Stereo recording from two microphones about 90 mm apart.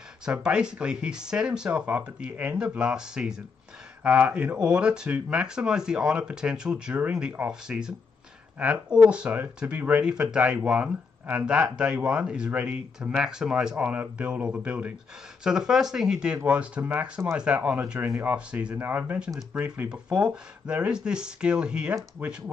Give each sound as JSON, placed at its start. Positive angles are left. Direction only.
{"t": 0.2, "sound": "speech", "side_deg": -10}